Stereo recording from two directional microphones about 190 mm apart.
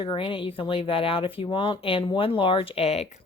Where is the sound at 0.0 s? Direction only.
25° left (ahead or behind).